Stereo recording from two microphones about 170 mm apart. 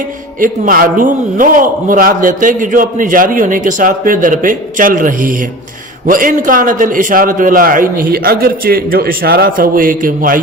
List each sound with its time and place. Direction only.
0.3 s a man's voice: 55° right (ahead or behind)